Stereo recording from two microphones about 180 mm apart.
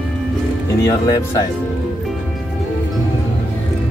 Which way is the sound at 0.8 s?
20° left (ahead or behind).